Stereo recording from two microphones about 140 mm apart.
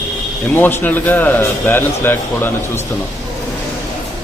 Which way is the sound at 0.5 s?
15° left (ahead or behind).